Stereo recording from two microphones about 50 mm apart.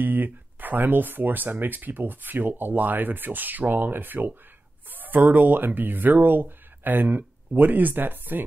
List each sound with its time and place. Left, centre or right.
0.0 s speech: right